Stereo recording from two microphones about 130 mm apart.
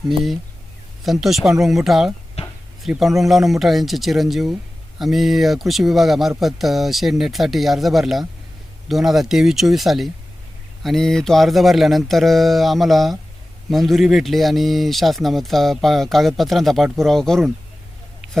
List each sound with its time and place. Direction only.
0.1 s speech: centre (ahead or behind)
2.4 s a sound: 55° left (ahead or behind)
2.8 s speech: centre (ahead or behind)